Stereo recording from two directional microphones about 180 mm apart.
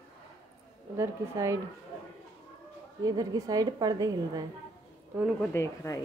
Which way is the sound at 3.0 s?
20° right (ahead or behind).